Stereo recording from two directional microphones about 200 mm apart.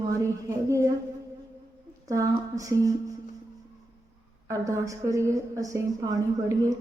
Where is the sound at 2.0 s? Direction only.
15° right (ahead or behind).